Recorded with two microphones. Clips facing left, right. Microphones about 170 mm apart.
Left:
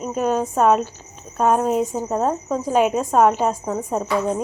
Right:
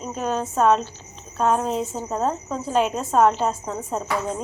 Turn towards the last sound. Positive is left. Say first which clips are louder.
# left 5 dB
turn(degrees=10)  # may be behind; listen again after turning